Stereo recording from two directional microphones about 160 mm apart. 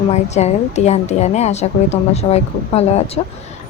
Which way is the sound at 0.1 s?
45° left (ahead or behind).